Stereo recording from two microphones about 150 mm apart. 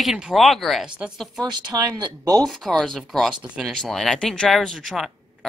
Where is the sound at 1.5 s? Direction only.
25° right (ahead or behind).